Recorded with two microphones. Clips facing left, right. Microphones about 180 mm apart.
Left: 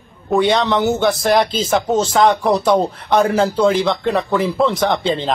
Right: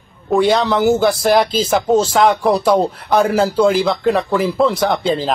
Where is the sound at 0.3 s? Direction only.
Centre (ahead or behind).